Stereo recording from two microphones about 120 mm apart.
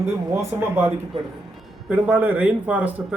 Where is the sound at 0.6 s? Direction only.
20° right (ahead or behind).